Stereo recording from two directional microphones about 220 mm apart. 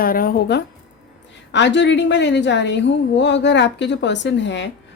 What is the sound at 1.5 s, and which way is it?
Speech, 55° left (ahead or behind).